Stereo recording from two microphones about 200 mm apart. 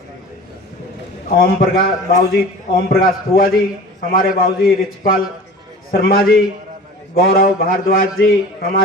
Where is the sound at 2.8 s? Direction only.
50° left (ahead or behind).